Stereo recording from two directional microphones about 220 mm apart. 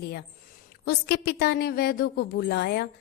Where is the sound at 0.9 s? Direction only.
50° left (ahead or behind).